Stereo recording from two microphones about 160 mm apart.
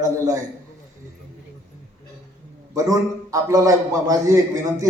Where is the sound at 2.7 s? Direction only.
20° right (ahead or behind).